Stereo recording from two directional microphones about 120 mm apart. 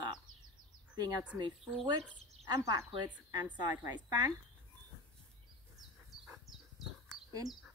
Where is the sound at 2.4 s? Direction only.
30° right (ahead or behind).